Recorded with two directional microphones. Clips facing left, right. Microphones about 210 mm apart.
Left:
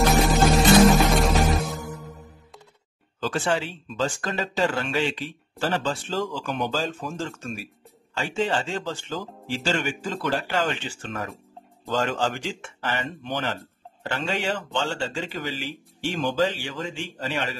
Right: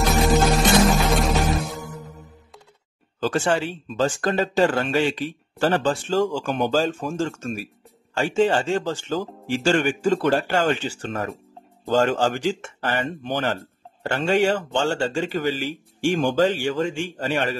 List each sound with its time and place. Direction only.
0.2 s music: centre (ahead or behind)
3.2 s speech: 45° right (ahead or behind)